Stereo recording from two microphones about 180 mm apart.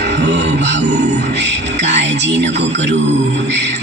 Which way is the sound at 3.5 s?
75° right (ahead or behind).